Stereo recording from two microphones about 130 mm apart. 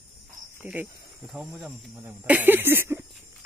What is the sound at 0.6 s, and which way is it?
Speech, 15° right (ahead or behind).